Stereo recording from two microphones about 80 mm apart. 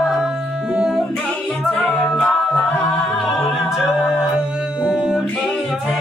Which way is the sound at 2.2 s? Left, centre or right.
Centre.